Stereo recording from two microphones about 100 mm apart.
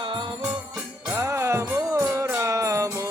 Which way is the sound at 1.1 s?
30° right (ahead or behind).